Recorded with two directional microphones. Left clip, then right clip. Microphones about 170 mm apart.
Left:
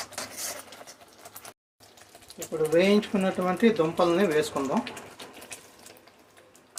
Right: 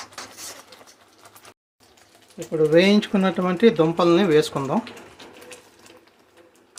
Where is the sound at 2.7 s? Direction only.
55° right (ahead or behind).